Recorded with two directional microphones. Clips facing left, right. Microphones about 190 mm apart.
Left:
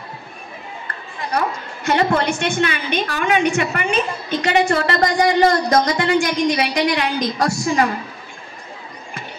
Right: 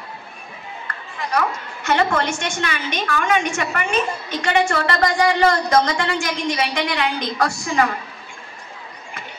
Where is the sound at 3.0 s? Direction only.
35° left (ahead or behind).